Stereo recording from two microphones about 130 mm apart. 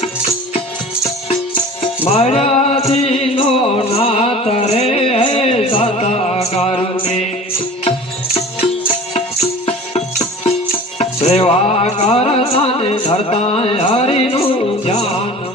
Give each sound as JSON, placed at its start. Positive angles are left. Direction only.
{"t": 2.0, "sound": "music", "side_deg": 50}
{"t": 9.1, "sound": "music", "side_deg": 50}